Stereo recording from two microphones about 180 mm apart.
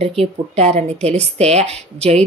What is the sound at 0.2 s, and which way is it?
Speech, 35° right (ahead or behind).